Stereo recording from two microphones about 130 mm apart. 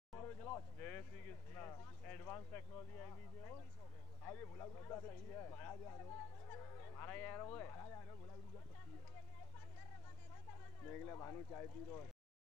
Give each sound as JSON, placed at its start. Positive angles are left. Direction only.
{"t": 0.2, "sound": "a man's voice", "side_deg": 20}
{"t": 6.5, "sound": "honk", "side_deg": 15}
{"t": 10.8, "sound": "a man's voice", "side_deg": 20}